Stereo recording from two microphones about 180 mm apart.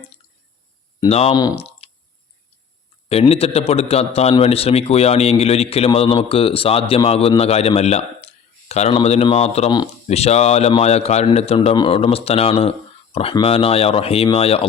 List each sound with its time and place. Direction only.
0.9 s speech: 35° left (ahead or behind)
1.8 s a sound: 30° left (ahead or behind)
3.1 s a man's voice: 35° left (ahead or behind)